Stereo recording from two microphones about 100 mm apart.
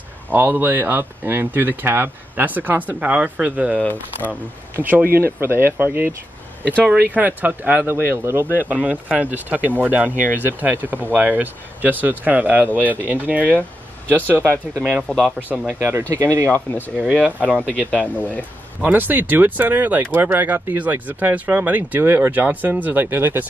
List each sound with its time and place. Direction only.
0.3 s speech: 25° right (ahead or behind)
3.7 s speech: 20° left (ahead or behind)
4.7 s speech: 20° right (ahead or behind)
15.0 s speech: centre (ahead or behind)
16.1 s speech: 30° right (ahead or behind)
16.4 s speech: 20° left (ahead or behind)
17.2 s speech: 15° right (ahead or behind)
17.6 s speech: 10° left (ahead or behind)
18.8 s speech: 15° right (ahead or behind)